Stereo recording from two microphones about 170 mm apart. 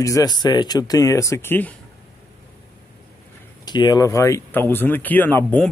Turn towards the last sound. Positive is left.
turn(degrees=10)  # may be behind; listen again after turning